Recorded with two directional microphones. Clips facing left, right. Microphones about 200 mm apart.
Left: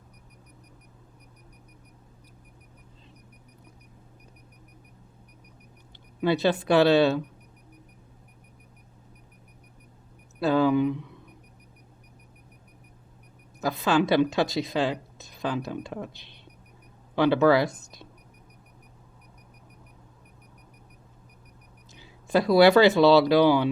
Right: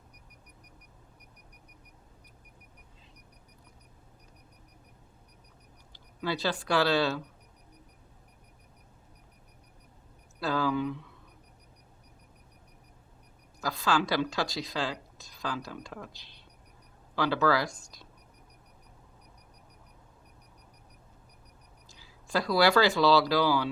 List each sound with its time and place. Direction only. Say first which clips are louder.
6.2 s speech: left 8 dB; 20° left (ahead or behind)
10.4 s a sound: left 8 dB; 20° left (ahead or behind)
13.6 s speech: left 6 dB; 20° left (ahead or behind)
21.9 s speech: left 7 dB; 20° left (ahead or behind)